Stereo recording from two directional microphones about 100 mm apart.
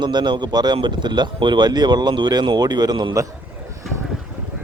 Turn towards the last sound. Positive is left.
turn(degrees=-45)  # may be behind; listen again after turning